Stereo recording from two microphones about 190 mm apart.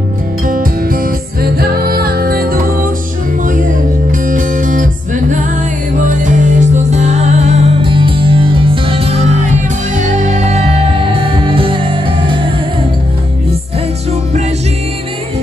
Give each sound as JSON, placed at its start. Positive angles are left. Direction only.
{"t": 0.5, "sound": "music", "side_deg": -50}